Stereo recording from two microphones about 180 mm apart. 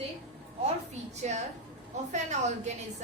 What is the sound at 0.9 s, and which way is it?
A woman's voice, 40° right (ahead or behind).